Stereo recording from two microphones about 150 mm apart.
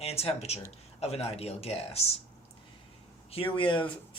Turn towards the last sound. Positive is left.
turn(degrees=35)  # may be behind; listen again after turning